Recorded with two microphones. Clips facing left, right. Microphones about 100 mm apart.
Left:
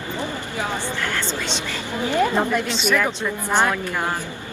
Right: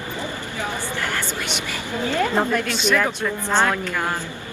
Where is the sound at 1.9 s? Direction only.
20° left (ahead or behind).